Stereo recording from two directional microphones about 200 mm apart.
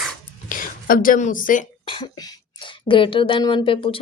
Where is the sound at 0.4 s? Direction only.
45° left (ahead or behind).